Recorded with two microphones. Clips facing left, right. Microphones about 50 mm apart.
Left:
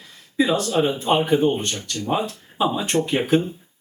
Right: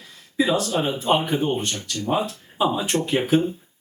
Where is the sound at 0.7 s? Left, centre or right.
Centre.